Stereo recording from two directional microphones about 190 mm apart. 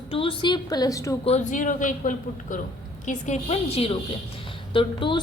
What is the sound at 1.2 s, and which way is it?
A woman's voice, 35° left (ahead or behind).